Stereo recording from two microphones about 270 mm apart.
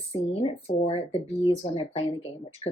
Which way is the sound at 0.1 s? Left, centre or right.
Left.